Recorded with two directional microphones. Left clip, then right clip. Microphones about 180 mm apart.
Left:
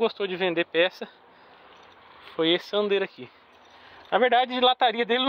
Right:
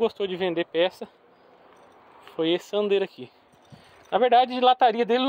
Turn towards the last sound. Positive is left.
turn(degrees=-20)  # may be behind; listen again after turning